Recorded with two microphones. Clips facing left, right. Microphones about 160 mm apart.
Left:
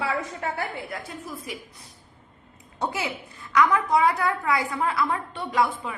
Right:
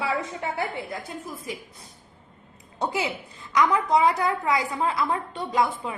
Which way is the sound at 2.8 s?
20° right (ahead or behind).